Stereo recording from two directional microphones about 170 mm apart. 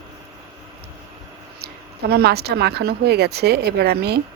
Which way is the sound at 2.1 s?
70° right (ahead or behind).